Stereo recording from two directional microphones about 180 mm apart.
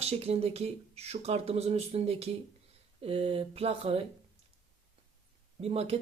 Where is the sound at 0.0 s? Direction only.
35° right (ahead or behind).